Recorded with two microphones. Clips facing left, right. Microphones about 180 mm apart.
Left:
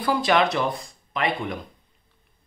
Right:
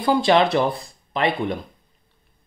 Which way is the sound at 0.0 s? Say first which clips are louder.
Right 4 dB; 25° right (ahead or behind).